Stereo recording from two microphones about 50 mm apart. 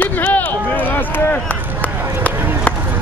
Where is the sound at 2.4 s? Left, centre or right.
Right.